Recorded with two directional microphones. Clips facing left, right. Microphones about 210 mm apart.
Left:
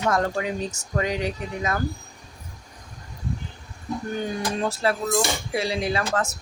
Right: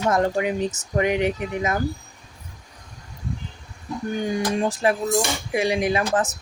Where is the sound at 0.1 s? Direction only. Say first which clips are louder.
Right 4 dB; 20° right (ahead or behind).